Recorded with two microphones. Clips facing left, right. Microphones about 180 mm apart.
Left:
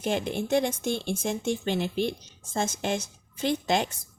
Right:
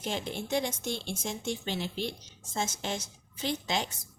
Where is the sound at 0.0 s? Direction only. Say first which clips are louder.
Left 7 dB; 55° left (ahead or behind).